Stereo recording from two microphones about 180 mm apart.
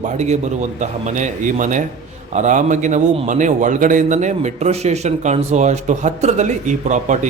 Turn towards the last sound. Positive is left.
turn(degrees=-40)  # may be behind; listen again after turning